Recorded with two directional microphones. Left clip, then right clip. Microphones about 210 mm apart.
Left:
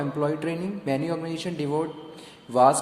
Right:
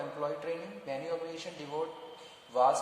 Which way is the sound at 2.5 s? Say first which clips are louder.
Left 9 dB; 40° left (ahead or behind).